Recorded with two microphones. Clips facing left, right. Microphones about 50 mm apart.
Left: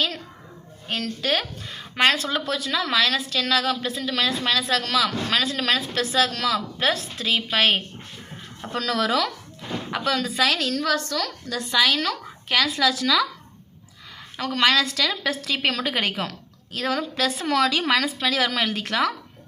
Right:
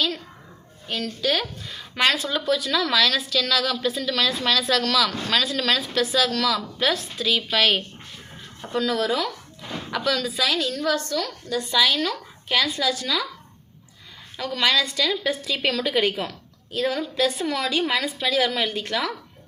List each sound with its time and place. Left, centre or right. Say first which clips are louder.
0.9 s a woman's voice: even; left
8.7 s a woman's voice: even; left
9.9 s speech: even; left
10.2 s a woman's voice: left 1 dB; left
14.3 s a woman's voice: left 2 dB; left